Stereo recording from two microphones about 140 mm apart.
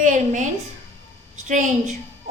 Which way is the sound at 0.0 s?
65° right (ahead or behind).